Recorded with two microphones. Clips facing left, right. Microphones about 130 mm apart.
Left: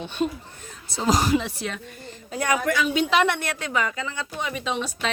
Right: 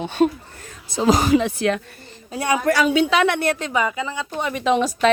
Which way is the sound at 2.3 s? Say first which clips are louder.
Right 4 dB; 30° right (ahead or behind).